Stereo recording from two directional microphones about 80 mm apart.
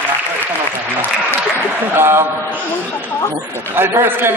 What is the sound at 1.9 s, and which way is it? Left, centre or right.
Speech, right.